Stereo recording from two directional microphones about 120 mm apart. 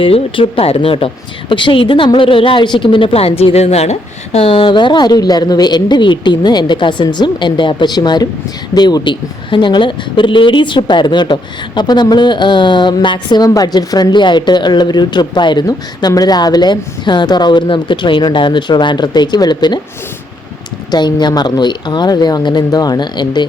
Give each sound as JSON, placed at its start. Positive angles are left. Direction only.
{"t": 0.0, "sound": "speech", "side_deg": 50}
{"t": 20.9, "sound": "speech", "side_deg": 35}